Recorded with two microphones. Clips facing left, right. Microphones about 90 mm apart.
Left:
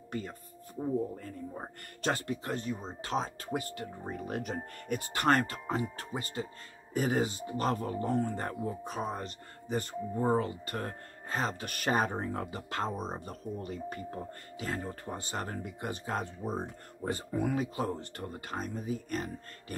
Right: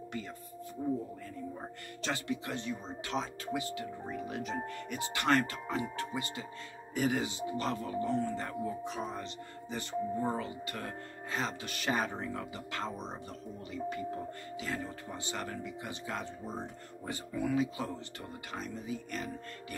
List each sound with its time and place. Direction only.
2.0 s speech: 45° left (ahead or behind)